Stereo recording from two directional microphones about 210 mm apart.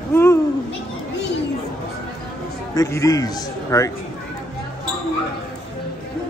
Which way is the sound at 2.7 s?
15° left (ahead or behind).